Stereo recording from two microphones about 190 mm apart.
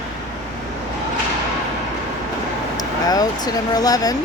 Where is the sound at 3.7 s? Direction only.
20° left (ahead or behind).